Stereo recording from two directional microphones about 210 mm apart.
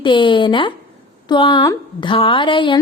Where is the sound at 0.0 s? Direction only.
25° left (ahead or behind).